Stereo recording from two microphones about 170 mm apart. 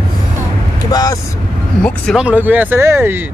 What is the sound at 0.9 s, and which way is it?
Speech, 20° left (ahead or behind).